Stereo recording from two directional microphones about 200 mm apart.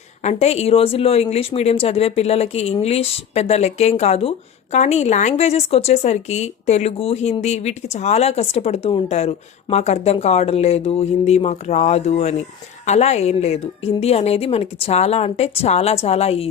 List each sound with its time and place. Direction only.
0.3 s speech: 35° left (ahead or behind)